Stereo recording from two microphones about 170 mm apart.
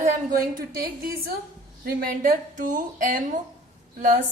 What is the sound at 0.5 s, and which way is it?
Speech, 60° right (ahead or behind).